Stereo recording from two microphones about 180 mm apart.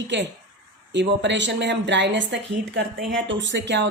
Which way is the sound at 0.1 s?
80° right.